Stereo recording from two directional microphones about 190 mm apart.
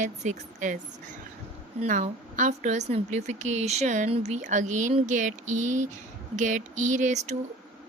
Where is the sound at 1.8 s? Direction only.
35° right (ahead or behind).